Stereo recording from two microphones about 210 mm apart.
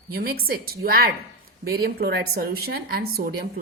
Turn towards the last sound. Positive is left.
turn(degrees=-45)  # may be behind; listen again after turning